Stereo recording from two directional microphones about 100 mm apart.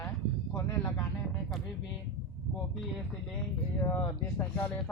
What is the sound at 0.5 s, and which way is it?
Speech, 30° left (ahead or behind).